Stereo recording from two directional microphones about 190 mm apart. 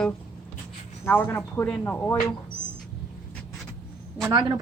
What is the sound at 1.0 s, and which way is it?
Speech, 10° left (ahead or behind).